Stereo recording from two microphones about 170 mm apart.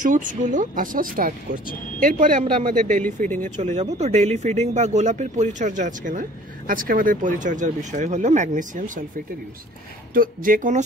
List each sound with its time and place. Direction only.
0.0 s speech: 50° right (ahead or behind)
10.1 s speech: 55° right (ahead or behind)